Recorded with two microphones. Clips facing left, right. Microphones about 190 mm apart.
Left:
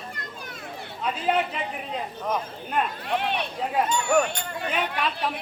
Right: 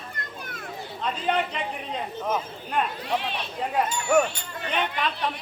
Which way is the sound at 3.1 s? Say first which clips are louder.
Left 5 dB; 60° left (ahead or behind).